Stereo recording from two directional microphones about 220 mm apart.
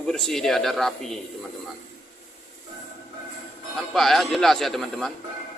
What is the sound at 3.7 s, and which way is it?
A man's voice, centre (ahead or behind).